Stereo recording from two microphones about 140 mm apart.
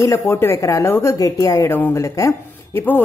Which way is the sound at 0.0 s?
20° left (ahead or behind).